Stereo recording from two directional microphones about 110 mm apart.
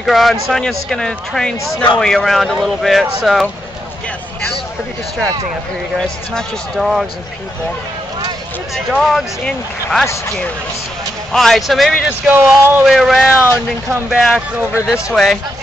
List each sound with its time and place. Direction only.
0.0 s speech: centre (ahead or behind)
5.9 s speech: centre (ahead or behind)
8.7 s speech: centre (ahead or behind)
11.3 s speech: 5° left (ahead or behind)
12.3 s speech: 20° right (ahead or behind)
12.8 s speech: centre (ahead or behind)
13.3 s speech: 20° left (ahead or behind)
14.1 s speech: 5° right (ahead or behind)